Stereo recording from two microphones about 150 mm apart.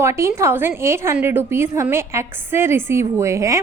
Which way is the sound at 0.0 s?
20° right (ahead or behind).